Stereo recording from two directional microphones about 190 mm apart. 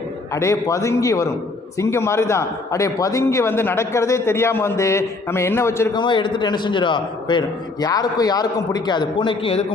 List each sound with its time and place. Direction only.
0.3 s a man's voice: 15° left (ahead or behind)